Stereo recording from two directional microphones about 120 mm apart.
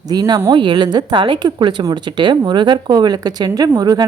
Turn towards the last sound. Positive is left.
turn(degrees=-35)  # may be behind; listen again after turning